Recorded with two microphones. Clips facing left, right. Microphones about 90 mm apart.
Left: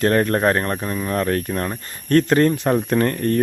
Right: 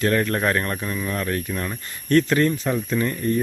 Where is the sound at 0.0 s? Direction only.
40° left (ahead or behind).